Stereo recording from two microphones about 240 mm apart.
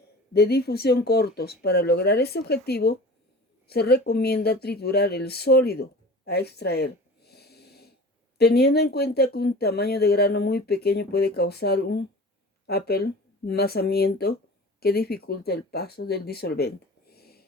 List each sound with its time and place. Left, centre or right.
0.3 s speech: left